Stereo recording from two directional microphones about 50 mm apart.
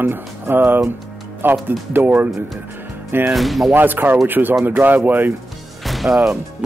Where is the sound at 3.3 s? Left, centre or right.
Centre.